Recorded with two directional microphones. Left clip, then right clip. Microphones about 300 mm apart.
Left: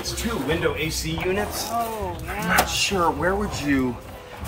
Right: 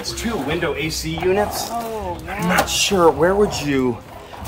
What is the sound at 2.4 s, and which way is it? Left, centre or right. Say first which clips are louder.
Speech: right 3 dB; right.